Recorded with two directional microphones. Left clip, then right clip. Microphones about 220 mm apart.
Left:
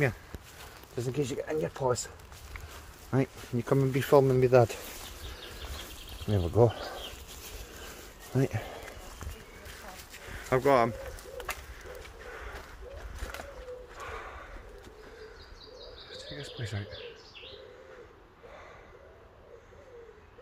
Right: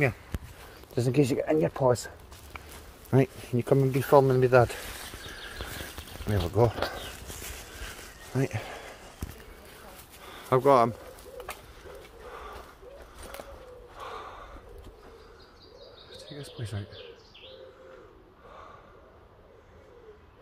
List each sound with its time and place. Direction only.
0.9 s speech: 35° right (ahead or behind)
3.1 s speech: 20° right (ahead or behind); by 4.1 s 5° right (ahead or behind)
4.1 s speech: 10° left (ahead or behind)
6.3 s speech: 10° left (ahead or behind)
8.3 s speech: 15° left (ahead or behind)
10.2 s a sound: 15° right (ahead or behind)
12.3 s a sound: 10° right (ahead or behind)
13.9 s a sound: 10° right (ahead or behind)
16.3 s bird: 5° right (ahead or behind)